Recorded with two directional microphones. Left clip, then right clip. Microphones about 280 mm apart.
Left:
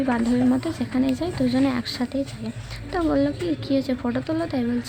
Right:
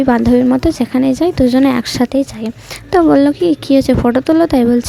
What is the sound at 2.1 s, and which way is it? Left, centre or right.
Speech, right.